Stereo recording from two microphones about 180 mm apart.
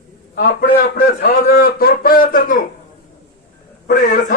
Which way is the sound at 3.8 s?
45° left (ahead or behind).